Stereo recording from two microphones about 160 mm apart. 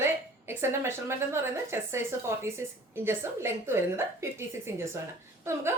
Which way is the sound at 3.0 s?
15° right (ahead or behind).